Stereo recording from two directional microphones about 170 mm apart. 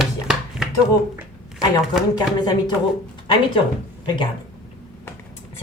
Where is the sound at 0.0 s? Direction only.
Centre (ahead or behind).